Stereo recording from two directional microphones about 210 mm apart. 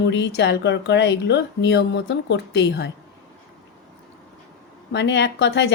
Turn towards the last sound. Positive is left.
turn(degrees=55)  # may be behind; listen again after turning